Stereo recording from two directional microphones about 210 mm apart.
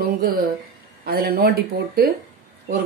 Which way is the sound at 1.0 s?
45° right (ahead or behind).